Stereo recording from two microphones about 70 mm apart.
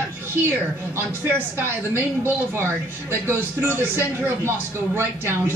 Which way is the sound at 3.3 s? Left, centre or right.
Right.